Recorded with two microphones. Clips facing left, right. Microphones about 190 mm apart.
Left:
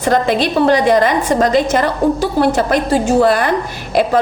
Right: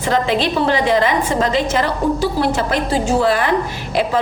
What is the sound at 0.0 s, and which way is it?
A woman's voice, 45° left (ahead or behind).